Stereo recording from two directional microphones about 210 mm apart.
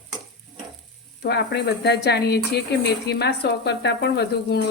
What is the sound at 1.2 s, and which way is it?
Speech, 55° left (ahead or behind).